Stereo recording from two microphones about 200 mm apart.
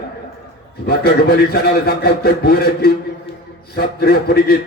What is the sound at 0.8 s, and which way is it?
A man's voice, 50° left (ahead or behind).